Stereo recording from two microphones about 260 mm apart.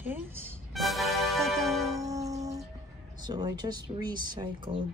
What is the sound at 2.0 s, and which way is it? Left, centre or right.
Music, centre.